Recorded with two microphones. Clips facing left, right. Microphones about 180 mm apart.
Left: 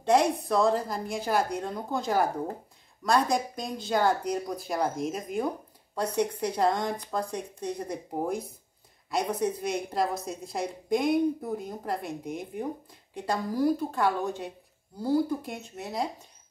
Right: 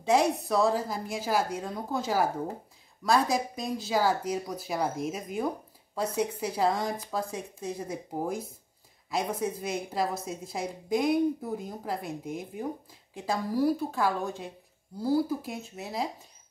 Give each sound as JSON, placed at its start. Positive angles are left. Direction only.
{"t": 0.0, "sound": "a woman's voice", "side_deg": -5}